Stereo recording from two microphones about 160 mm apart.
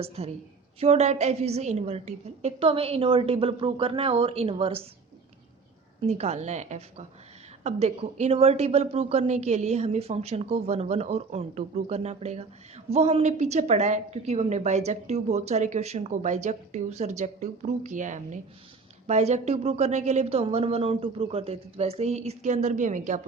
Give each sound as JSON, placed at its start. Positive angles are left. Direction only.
{"t": 0.0, "sound": "a woman's voice", "side_deg": -40}
{"t": 6.0, "sound": "a woman's voice", "side_deg": -40}